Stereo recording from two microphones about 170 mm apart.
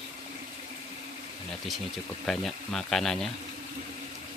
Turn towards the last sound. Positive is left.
turn(degrees=0)  # may be behind; listen again after turning